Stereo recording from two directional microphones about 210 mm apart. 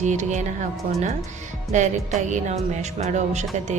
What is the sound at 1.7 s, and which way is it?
Speech, 35° right (ahead or behind).